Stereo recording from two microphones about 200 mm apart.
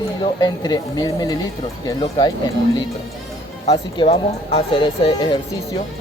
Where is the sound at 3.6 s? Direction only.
25° left (ahead or behind).